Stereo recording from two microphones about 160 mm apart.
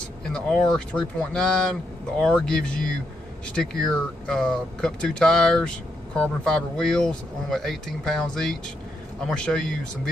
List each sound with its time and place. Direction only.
0.2 s speech: 5° left (ahead or behind)